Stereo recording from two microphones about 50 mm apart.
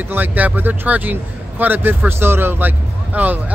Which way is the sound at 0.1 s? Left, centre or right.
Right.